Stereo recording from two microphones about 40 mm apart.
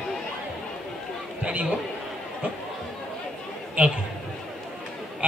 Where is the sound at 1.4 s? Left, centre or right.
Right.